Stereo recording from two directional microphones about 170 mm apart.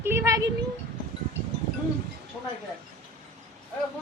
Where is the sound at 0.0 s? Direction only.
15° right (ahead or behind).